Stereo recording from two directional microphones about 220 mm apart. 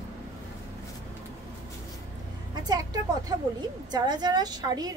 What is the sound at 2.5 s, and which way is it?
A woman's voice, 20° right (ahead or behind).